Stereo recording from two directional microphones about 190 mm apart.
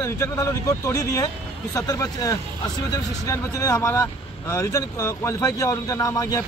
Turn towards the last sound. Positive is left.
turn(degrees=15)  # may be behind; listen again after turning